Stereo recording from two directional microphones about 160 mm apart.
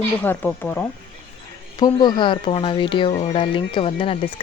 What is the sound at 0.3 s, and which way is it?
Speech, 10° left (ahead or behind).